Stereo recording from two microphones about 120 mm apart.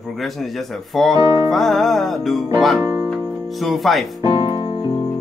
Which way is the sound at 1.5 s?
Centre (ahead or behind).